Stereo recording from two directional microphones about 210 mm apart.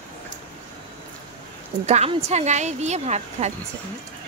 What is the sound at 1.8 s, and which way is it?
Speech, 30° right (ahead or behind).